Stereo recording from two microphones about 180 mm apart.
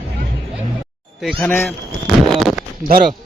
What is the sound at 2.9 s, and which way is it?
Speech, 55° right (ahead or behind).